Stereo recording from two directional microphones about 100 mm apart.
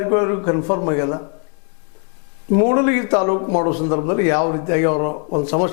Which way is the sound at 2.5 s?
15° left (ahead or behind).